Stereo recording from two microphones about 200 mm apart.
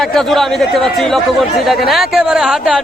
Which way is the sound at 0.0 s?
Centre (ahead or behind).